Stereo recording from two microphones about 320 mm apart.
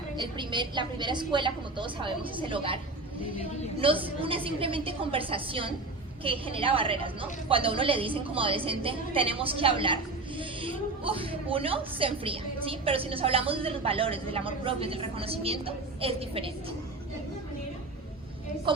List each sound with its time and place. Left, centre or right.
0.2 s a woman's voice: centre
3.8 s a woman's voice: centre